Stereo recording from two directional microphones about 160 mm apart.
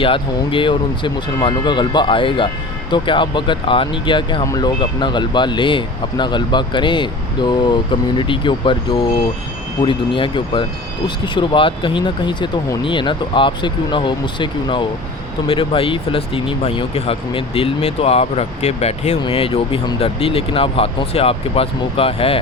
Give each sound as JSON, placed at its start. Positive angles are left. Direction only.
{"t": 0.0, "sound": "speech", "side_deg": 35}